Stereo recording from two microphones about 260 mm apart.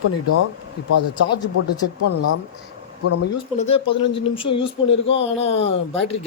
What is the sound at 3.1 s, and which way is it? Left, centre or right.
Speech, left.